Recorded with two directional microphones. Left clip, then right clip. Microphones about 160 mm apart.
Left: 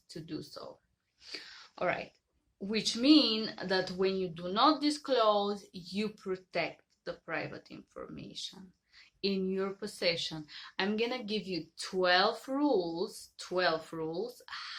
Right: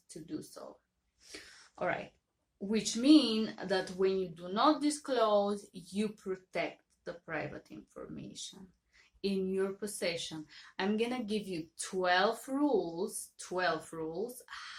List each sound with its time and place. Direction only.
0.1 s speech: 20° left (ahead or behind)
1.3 s a sound: 25° left (ahead or behind)
2.6 s speech: 20° left (ahead or behind)